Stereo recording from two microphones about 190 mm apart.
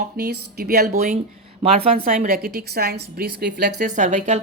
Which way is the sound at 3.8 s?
40° right (ahead or behind).